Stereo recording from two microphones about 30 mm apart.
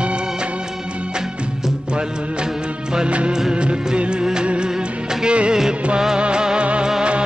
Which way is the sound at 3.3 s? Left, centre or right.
Right.